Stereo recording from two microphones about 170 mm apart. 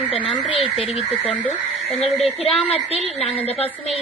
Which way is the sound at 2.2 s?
35° left (ahead or behind).